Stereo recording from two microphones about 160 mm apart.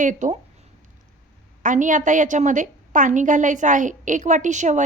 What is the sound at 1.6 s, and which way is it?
A woman's voice, 55° right (ahead or behind).